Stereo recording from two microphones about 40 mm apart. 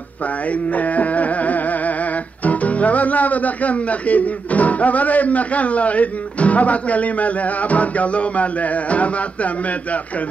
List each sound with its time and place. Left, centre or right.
0.7 s music: left
2.4 s speech: left